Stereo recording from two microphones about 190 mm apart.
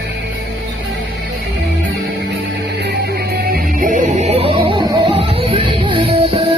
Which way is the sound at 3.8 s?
45° right (ahead or behind).